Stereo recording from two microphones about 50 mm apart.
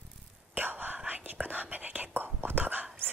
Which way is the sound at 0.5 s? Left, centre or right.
Right.